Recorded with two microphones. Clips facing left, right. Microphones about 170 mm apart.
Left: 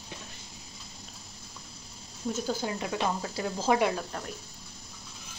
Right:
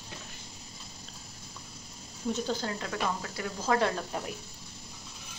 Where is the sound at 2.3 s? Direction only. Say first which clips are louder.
Left 3 dB; 10° left (ahead or behind).